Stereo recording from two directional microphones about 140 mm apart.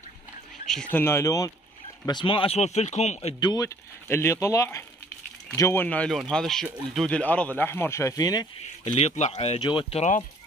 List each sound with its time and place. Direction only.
0.7 s speech: 5° left (ahead or behind)
1.0 s speech: 20° left (ahead or behind)
2.0 s speech: 35° left (ahead or behind)
3.3 s speech: 30° left (ahead or behind)
8.8 s speech: 50° left (ahead or behind)
9.6 s speech: 35° left (ahead or behind)